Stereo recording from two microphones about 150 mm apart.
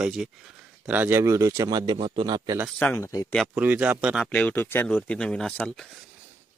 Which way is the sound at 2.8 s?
15° left (ahead or behind).